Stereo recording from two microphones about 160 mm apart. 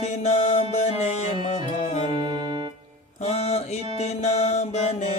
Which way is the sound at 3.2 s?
40° left (ahead or behind).